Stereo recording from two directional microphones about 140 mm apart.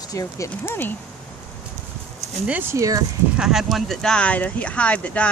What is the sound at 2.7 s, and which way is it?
Speech, 25° right (ahead or behind).